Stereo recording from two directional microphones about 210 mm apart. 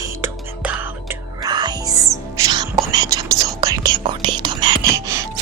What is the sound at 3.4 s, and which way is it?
Whispering, 15° right (ahead or behind).